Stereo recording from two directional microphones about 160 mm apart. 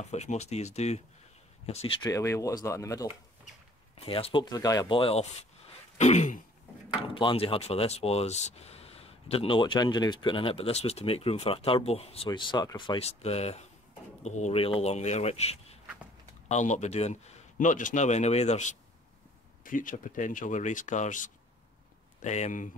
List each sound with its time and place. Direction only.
0.0 s speech: 45° left (ahead or behind)
2.0 s speech: 20° left (ahead or behind)
4.0 s speech: 35° left (ahead or behind)
7.0 s speech: 35° left (ahead or behind)
12.3 s speech: 25° left (ahead or behind); by 18.8 s 45° left (ahead or behind)
19.6 s speech: 55° left (ahead or behind)